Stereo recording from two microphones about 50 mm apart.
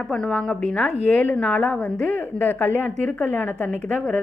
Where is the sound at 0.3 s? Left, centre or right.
Centre.